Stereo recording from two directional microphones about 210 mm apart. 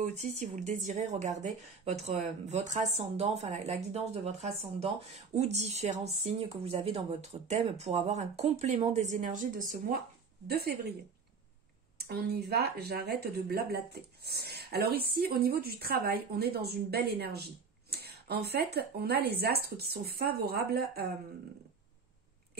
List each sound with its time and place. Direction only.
0.0 s speech: 35° right (ahead or behind)
10.4 s speech: 50° right (ahead or behind)
12.1 s speech: 50° right (ahead or behind)